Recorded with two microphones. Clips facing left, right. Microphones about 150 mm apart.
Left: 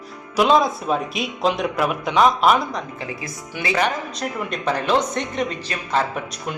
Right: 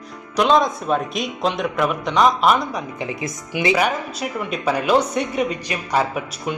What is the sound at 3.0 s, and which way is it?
A man's voice, 20° right (ahead or behind).